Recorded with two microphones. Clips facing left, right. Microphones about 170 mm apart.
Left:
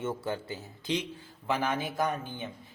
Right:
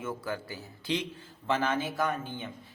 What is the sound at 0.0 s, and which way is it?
A man's voice, 25° left (ahead or behind).